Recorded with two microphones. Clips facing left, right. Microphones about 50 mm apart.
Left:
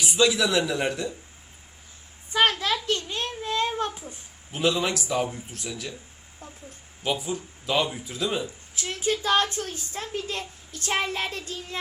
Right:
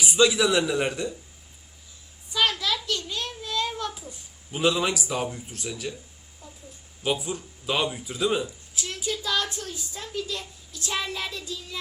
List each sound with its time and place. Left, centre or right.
0.0 s speech: centre
2.3 s a sound: left
4.5 s speech: centre
6.4 s a woman's voice: left
7.0 s speech: centre
8.7 s a woman's voice: left